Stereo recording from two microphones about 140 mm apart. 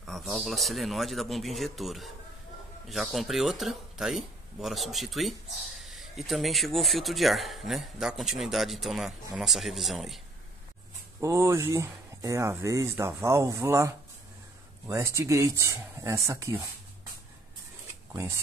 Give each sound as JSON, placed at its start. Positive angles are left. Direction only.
{"t": 0.0, "sound": "speech", "side_deg": 0}
{"t": 11.1, "sound": "speech", "side_deg": -20}